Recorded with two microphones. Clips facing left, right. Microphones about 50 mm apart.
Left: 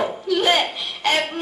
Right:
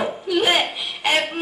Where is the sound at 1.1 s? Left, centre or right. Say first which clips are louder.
Even; centre.